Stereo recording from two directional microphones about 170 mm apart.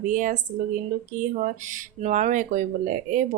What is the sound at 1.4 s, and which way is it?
Speech, 50° right (ahead or behind).